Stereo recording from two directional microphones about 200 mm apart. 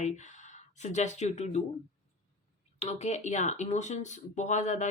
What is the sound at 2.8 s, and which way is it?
Speech, 35° left (ahead or behind).